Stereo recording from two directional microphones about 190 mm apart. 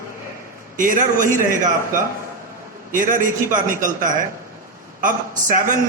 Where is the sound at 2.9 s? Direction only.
45° right (ahead or behind).